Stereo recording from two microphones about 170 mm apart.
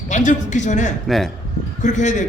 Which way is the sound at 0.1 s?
45° left (ahead or behind).